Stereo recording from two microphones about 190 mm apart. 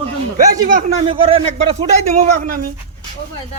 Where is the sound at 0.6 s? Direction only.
45° right (ahead or behind).